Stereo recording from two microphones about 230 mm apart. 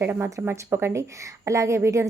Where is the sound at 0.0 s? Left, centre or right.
Centre.